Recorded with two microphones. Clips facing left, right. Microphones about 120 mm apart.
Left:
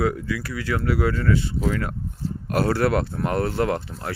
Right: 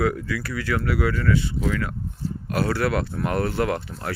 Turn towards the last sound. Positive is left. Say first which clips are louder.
# left 1 dB
turn(degrees=30)  # may be behind; listen again after turning